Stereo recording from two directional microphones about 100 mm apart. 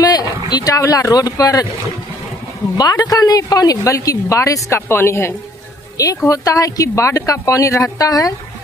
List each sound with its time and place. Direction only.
0.0 s a sound: 40° left (ahead or behind)
0.5 s a woman's voice: 40° left (ahead or behind)
2.8 s a woman's voice: 40° left (ahead or behind)